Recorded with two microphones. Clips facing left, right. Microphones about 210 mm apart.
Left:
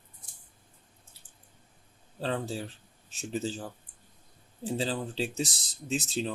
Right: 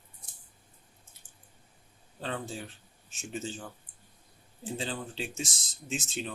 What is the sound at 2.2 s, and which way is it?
Speech, 35° left (ahead or behind).